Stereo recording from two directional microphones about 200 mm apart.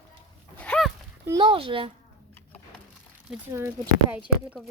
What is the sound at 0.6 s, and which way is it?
Dog, 5° left (ahead or behind).